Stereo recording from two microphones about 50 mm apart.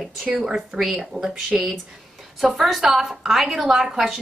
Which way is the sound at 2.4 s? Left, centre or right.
Centre.